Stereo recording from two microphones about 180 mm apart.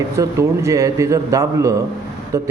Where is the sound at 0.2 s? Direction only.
15° right (ahead or behind).